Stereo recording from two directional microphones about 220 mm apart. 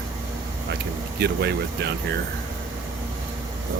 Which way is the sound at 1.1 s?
50° right (ahead or behind).